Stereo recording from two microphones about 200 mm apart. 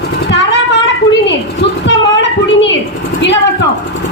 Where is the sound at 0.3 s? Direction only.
65° left (ahead or behind).